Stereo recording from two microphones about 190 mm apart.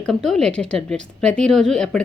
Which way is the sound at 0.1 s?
Centre (ahead or behind).